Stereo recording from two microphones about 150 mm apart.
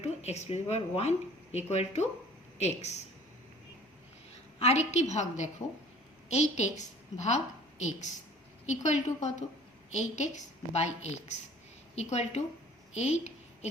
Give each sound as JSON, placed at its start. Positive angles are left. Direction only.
{"t": 0.0, "sound": "a woman's voice", "side_deg": 45}
{"t": 4.6, "sound": "a woman's voice", "side_deg": 50}
{"t": 12.9, "sound": "a sound", "side_deg": 50}